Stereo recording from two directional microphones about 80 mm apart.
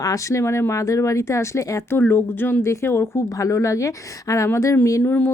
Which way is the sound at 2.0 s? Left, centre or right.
Left.